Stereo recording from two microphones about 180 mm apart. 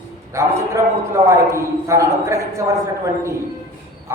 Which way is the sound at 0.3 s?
15° right (ahead or behind).